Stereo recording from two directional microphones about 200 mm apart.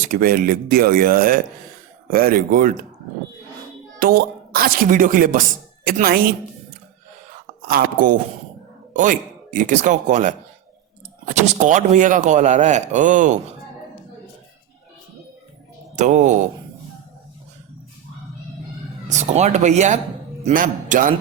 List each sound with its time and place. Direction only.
0.0 s speech: 45° right (ahead or behind)
4.0 s speech: 45° right (ahead or behind)
7.7 s speech: 45° right (ahead or behind)
16.0 s speech: 35° right (ahead or behind)
19.0 s speech: 35° right (ahead or behind)